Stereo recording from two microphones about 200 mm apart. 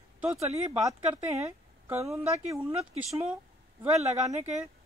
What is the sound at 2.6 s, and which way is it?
Speech, 25° right (ahead or behind).